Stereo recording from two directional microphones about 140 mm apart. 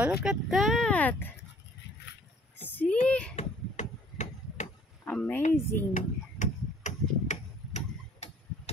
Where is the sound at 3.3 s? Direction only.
55° left (ahead or behind).